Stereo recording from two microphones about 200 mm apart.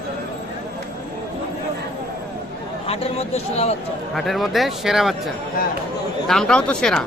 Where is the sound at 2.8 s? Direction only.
30° left (ahead or behind).